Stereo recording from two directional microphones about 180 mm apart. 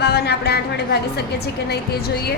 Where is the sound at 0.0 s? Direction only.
65° left (ahead or behind).